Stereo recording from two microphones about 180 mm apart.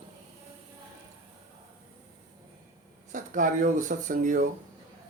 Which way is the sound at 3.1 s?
45° right (ahead or behind).